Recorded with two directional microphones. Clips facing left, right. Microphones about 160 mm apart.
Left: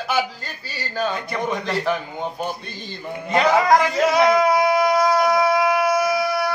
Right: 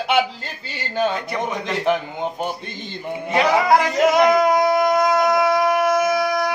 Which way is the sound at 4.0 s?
20° right (ahead or behind).